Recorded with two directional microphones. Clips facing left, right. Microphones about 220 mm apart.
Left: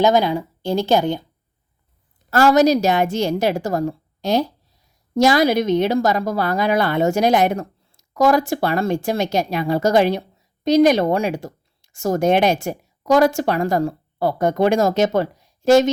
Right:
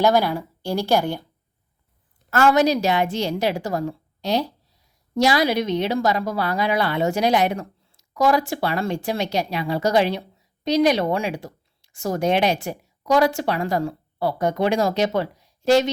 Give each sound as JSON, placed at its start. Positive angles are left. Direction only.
{"t": 0.0, "sound": "a woman's voice", "side_deg": 20}
{"t": 2.3, "sound": "a woman's voice", "side_deg": 40}